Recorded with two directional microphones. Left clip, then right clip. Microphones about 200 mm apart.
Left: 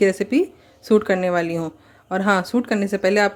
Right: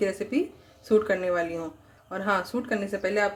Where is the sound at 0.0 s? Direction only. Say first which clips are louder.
Left 9 dB; 40° left (ahead or behind).